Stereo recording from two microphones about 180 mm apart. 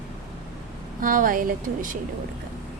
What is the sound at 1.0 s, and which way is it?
Speech, 50° right (ahead or behind).